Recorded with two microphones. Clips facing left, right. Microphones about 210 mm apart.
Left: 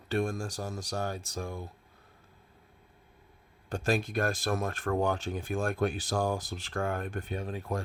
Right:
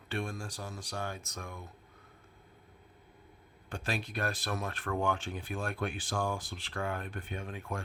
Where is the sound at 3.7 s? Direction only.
45° left (ahead or behind).